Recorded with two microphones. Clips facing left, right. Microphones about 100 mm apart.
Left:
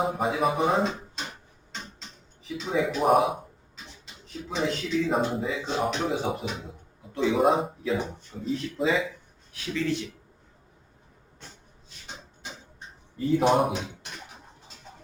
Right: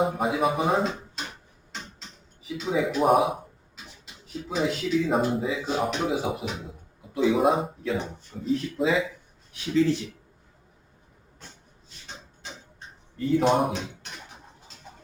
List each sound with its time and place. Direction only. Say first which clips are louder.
0.0 s speech: right 1 dB; centre (ahead or behind)
1.7 s a sound: even; centre (ahead or behind)
4.0 s speech: right 3 dB; 5° right (ahead or behind)
9.7 s speech: right 6 dB; 30° right (ahead or behind)
13.1 s speech: even; centre (ahead or behind)